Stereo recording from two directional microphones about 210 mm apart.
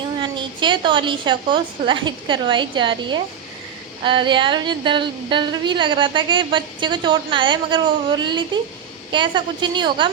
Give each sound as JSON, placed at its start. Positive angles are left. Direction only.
{"t": 0.2, "sound": "a woman's voice", "side_deg": -20}